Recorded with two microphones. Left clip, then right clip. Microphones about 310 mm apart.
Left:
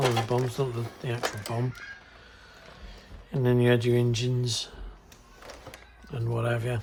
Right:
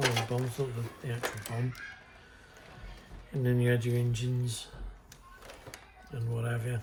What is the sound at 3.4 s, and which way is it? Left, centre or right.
Speech, centre.